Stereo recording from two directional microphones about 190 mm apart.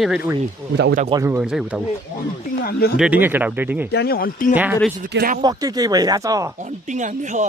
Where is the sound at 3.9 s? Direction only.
55° left (ahead or behind).